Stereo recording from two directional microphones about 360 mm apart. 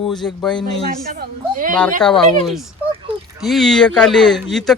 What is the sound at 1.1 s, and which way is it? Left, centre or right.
Speech, right.